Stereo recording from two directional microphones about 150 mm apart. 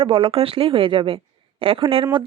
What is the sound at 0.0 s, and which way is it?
A woman's voice, 35° right (ahead or behind).